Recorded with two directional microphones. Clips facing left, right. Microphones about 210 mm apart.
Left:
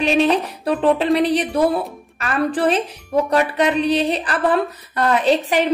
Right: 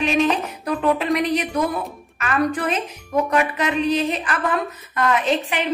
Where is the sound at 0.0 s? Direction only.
35° left (ahead or behind).